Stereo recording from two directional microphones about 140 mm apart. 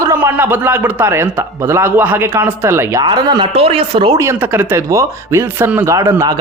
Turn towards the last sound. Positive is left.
turn(degrees=-25)  # may be behind; listen again after turning